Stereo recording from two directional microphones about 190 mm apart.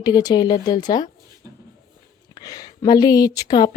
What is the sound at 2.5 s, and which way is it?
A woman's voice, 20° left (ahead or behind).